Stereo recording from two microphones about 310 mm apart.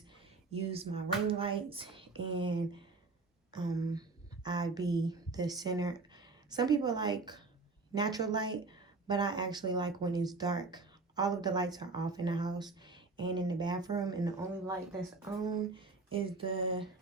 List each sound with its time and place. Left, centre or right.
0.6 s speech: centre